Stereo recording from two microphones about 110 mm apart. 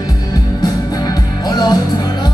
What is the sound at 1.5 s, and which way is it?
Music, 35° left (ahead or behind).